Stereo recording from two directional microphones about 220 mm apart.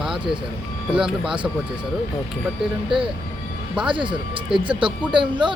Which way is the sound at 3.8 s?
20° right (ahead or behind).